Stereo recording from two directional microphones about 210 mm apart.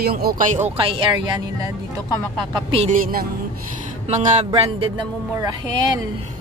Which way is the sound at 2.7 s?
30° right (ahead or behind).